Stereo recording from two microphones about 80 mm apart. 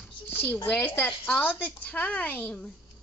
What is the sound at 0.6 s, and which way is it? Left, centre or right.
Speech, left.